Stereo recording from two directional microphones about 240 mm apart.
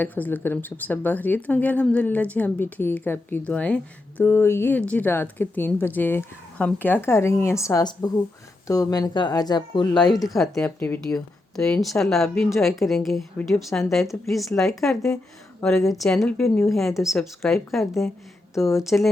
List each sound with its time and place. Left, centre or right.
0.0 s a woman's voice: centre
9.9 s speech: centre
18.5 s speech: centre
18.8 s speech: centre